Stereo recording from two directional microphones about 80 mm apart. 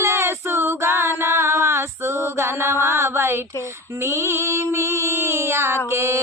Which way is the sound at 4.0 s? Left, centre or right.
Right.